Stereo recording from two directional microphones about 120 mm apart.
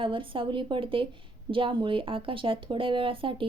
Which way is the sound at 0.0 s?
45° right (ahead or behind).